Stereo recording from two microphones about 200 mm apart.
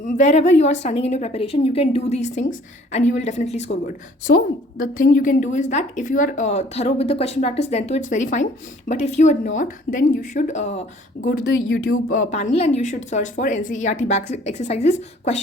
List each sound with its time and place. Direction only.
0.0 s a woman's voice: 35° left (ahead or behind)
4.9 s a woman's voice: 45° left (ahead or behind)